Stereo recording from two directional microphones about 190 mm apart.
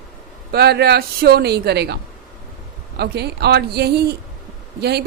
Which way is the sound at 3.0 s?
60° right (ahead or behind).